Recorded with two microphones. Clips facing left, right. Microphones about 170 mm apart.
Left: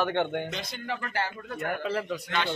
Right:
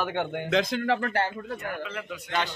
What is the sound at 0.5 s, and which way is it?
Speech, 90° right.